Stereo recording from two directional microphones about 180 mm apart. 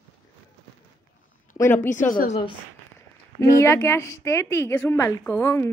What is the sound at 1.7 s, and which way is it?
Speech, 45° left (ahead or behind).